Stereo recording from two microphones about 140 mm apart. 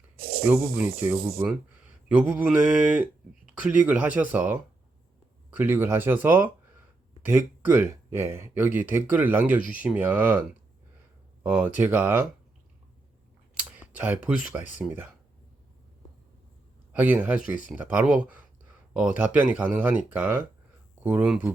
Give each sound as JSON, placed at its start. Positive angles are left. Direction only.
{"t": 0.2, "sound": "a sound", "side_deg": -90}
{"t": 0.4, "sound": "speech", "side_deg": -15}
{"t": 11.4, "sound": "speech", "side_deg": -10}
{"t": 13.6, "sound": "computer keyboard", "side_deg": -5}
{"t": 13.9, "sound": "speech", "side_deg": -10}
{"t": 16.9, "sound": "speech", "side_deg": -10}